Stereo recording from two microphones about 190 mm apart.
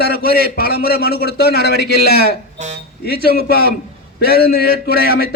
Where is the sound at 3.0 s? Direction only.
55° left (ahead or behind).